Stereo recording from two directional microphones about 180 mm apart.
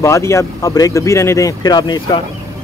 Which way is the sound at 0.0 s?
15° left (ahead or behind).